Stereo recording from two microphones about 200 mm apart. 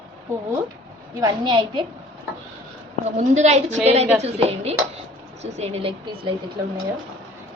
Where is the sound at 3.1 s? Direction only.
35° right (ahead or behind).